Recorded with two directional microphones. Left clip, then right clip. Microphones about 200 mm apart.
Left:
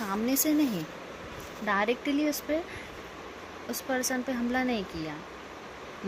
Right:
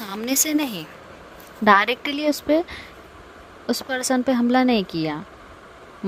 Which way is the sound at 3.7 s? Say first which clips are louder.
Right 8 dB; 45° right (ahead or behind).